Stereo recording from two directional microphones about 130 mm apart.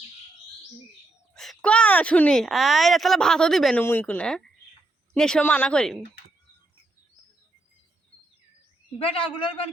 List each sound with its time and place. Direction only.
1.3 s speech: 5° left (ahead or behind)
3.8 s speech: 15° left (ahead or behind)
9.0 s a man's voice: 45° left (ahead or behind)